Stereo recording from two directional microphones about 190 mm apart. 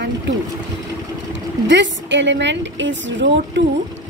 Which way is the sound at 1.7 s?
70° right (ahead or behind).